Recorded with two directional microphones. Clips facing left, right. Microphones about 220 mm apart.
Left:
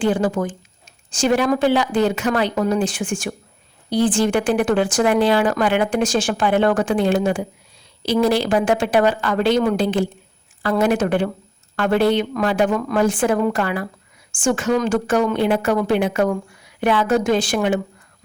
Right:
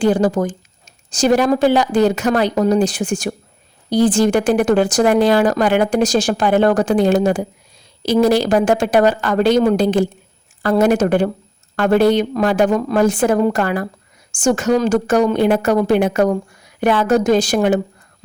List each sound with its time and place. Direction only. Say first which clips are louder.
0.0 s a woman's voice: right 4 dB; 40° right (ahead or behind)